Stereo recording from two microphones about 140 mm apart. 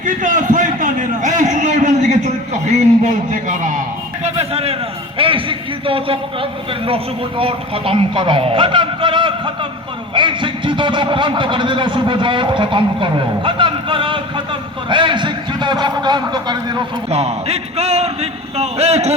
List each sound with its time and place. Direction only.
0.0 s a man's voice: 65° right (ahead or behind); by 16.8 s 30° right (ahead or behind)
17.1 s speech: 50° right (ahead or behind)